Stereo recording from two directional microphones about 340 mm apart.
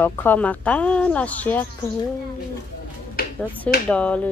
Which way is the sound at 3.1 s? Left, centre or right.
Left.